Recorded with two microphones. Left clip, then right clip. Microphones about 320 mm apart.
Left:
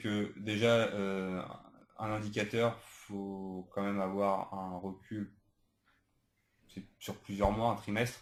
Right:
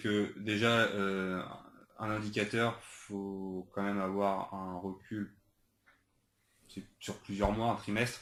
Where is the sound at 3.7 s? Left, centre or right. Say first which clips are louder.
Left 1 dB; left.